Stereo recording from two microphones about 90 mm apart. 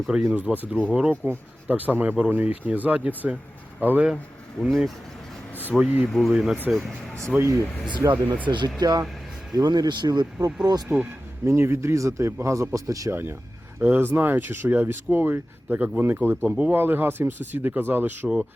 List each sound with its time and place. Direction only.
0.1 s speech: 15° right (ahead or behind)
5.8 s speech: 15° right (ahead or behind)
6.1 s speech: centre (ahead or behind)
7.3 s speech: 30° right (ahead or behind)
8.4 s speech: 55° right (ahead or behind)
10.8 s speech: 20° right (ahead or behind); by 13.1 s 40° right (ahead or behind)
13.7 s speech: 25° right (ahead or behind)